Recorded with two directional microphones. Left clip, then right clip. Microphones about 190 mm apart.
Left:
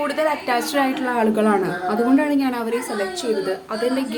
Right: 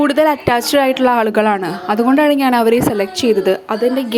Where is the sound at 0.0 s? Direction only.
45° right (ahead or behind).